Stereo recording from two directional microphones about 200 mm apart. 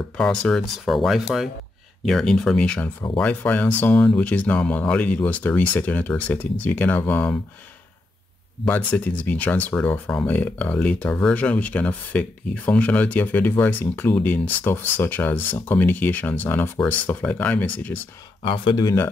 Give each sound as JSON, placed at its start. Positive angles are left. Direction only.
{"t": 0.2, "sound": "speech", "side_deg": 5}
{"t": 8.6, "sound": "speech", "side_deg": 10}
{"t": 18.4, "sound": "speech", "side_deg": 25}